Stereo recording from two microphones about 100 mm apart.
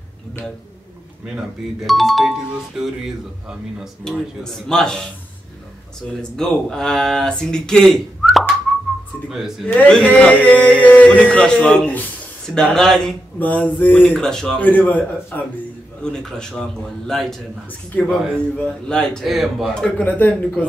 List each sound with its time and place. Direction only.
1.2 s speech: 5° right (ahead or behind)
6.3 s speech: 5° left (ahead or behind)
9.7 s speech: 10° left (ahead or behind)
13.4 s speech: 15° left (ahead or behind)
17.6 s speech: 15° left (ahead or behind)